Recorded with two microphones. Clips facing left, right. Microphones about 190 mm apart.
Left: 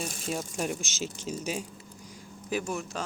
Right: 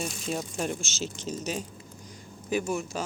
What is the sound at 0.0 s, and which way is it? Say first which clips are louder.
Speech: right 1 dB; 5° left (ahead or behind).